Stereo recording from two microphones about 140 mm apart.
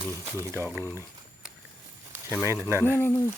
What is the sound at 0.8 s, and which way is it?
Speech, 15° left (ahead or behind).